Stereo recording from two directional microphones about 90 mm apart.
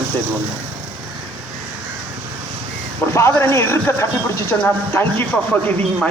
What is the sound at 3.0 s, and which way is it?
Speech, 30° left (ahead or behind).